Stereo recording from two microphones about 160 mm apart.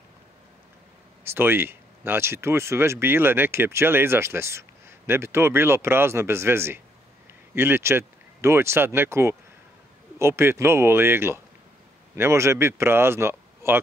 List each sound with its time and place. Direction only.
1.3 s speech: 15° right (ahead or behind)